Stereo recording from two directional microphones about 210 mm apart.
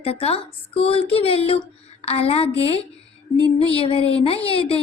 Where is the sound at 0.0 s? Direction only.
30° left (ahead or behind).